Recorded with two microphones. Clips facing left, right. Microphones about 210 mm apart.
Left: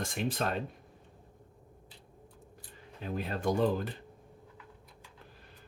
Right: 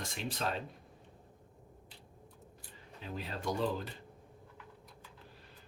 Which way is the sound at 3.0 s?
55° left (ahead or behind).